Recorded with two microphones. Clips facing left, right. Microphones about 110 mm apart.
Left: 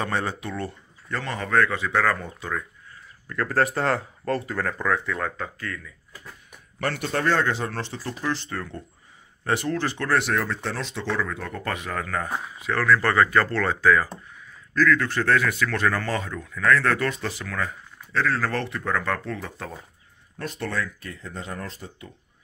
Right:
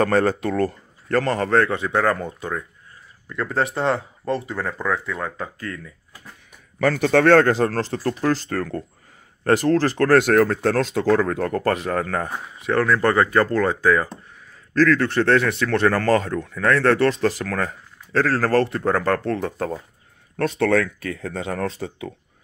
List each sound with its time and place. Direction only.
0.0 s a man's voice: 45° right (ahead or behind); by 3.7 s 20° right (ahead or behind)
3.9 s speech: centre (ahead or behind)
5.6 s speech: 30° right (ahead or behind)
7.0 s speech: 90° right
7.4 s speech: 45° right (ahead or behind)
9.9 s speech: 50° right (ahead or behind)
11.8 s speech: 40° right (ahead or behind)
12.8 s a man's voice: 30° right (ahead or behind)
14.7 s a man's voice: 35° right (ahead or behind)
15.9 s speech: 40° right (ahead or behind)
19.1 s speech: 45° right (ahead or behind)
20.3 s speech: 85° right